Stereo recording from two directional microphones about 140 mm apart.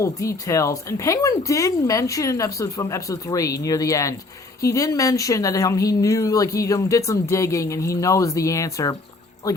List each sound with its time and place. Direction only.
0.0 s speech: 20° left (ahead or behind)